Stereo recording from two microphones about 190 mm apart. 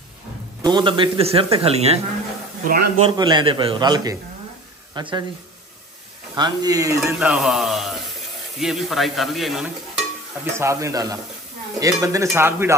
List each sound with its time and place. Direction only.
0.6 s speech: 25° right (ahead or behind)
2.6 s a man's voice: 50° right (ahead or behind)
3.0 s a man's voice: 25° right (ahead or behind)
6.3 s speech: 20° right (ahead or behind)
7.1 s a man's voice: 5° right (ahead or behind)
10.4 s speech: 15° right (ahead or behind)